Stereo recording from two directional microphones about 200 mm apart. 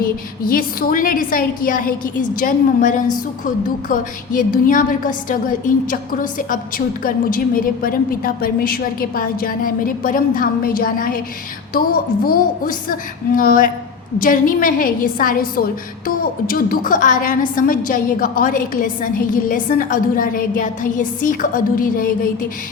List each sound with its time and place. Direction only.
0.0 s a woman's voice: 45° left (ahead or behind)